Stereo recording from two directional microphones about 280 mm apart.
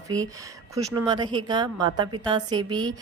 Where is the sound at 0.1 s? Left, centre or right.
Centre.